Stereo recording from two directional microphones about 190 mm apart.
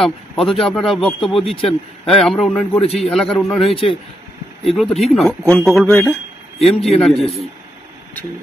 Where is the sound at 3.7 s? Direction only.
30° left (ahead or behind).